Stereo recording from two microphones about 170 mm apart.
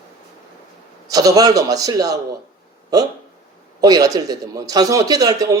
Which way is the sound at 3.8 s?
20° right (ahead or behind).